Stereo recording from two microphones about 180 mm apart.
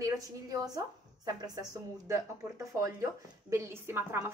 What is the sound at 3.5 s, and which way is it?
Speech, 15° right (ahead or behind).